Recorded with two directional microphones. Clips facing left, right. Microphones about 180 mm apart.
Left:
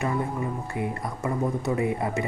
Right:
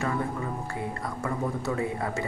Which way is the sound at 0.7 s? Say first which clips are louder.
Left 3 dB; 20° left (ahead or behind).